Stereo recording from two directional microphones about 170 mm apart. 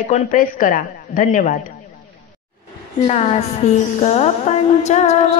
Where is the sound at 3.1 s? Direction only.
40° left (ahead or behind).